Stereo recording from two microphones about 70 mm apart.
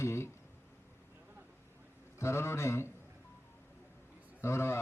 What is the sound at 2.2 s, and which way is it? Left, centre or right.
Speech, left.